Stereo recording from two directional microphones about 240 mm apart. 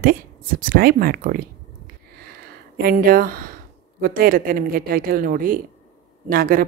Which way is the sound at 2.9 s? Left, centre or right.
Right.